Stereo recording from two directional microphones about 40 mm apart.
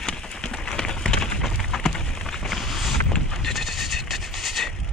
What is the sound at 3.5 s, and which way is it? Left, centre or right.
Train, centre.